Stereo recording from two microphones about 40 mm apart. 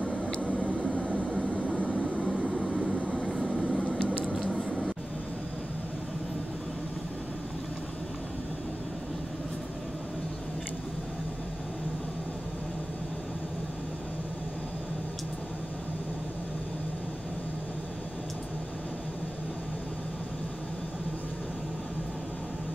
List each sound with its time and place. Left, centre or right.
0.9 s vehicle: left
2.2 s vehicle: right
3.6 s vehicle: left
4.2 s squish: centre